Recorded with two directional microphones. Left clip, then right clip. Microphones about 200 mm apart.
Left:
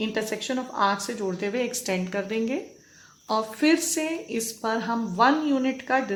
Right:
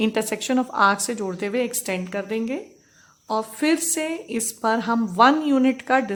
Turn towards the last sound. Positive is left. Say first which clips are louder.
# right 5 dB
turn(degrees=-35)  # may be behind; listen again after turning